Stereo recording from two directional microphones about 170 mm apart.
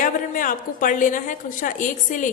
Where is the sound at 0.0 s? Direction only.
50° left (ahead or behind).